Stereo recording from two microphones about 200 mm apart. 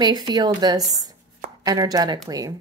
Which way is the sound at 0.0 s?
20° right (ahead or behind).